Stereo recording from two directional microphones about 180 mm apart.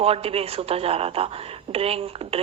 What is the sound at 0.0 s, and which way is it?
Speech, 35° right (ahead or behind).